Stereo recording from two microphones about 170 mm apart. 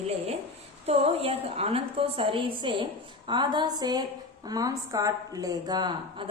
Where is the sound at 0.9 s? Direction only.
35° right (ahead or behind).